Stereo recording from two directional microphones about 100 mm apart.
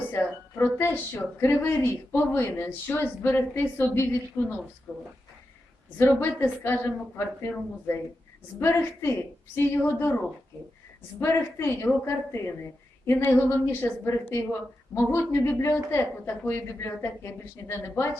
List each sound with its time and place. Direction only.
0.1 s a woman's voice: 20° left (ahead or behind)
4.9 s speech: 5° left (ahead or behind)
6.0 s a woman's voice: 20° left (ahead or behind)
8.5 s a woman's voice: 25° left (ahead or behind)
11.2 s a woman's voice: 25° left (ahead or behind)